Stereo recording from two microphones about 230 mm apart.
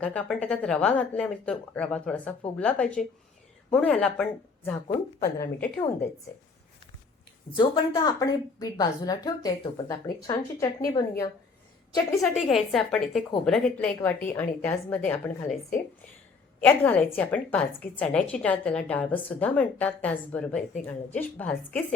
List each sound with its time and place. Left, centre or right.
0.0 s a woman's voice: centre
7.5 s a woman's voice: centre
12.5 s a woman's voice: centre
16.6 s a woman's voice: centre